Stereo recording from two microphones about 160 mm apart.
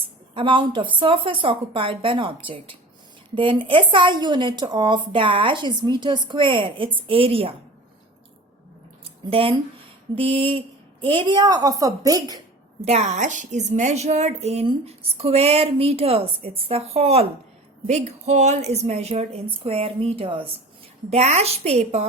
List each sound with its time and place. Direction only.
0.3 s a woman's voice: 30° right (ahead or behind)
9.0 s a sound: 35° right (ahead or behind)
10.2 s a woman's voice: 35° right (ahead or behind)
12.8 s a woman's voice: 45° right (ahead or behind)